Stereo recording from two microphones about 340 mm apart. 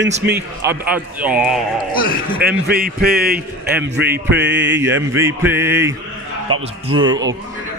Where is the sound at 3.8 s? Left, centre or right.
Right.